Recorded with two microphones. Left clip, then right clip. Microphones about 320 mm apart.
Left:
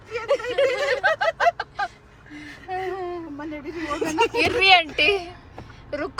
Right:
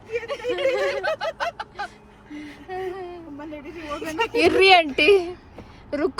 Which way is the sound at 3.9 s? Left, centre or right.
Left.